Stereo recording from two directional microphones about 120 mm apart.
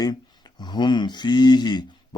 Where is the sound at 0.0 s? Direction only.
35° left (ahead or behind).